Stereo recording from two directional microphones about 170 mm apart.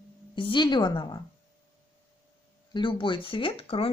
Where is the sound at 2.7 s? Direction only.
30° left (ahead or behind).